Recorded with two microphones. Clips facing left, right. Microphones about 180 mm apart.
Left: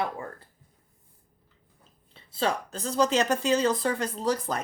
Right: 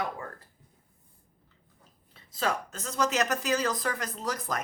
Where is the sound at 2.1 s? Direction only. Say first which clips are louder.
Left 3 dB; 30° left (ahead or behind).